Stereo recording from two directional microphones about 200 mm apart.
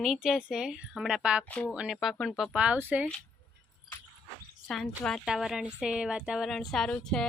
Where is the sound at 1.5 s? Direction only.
5° left (ahead or behind).